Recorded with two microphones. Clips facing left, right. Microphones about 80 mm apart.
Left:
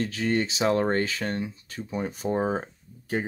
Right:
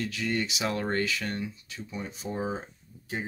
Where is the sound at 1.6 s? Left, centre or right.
Left.